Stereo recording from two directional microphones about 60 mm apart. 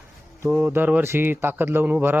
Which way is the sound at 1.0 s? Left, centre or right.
Right.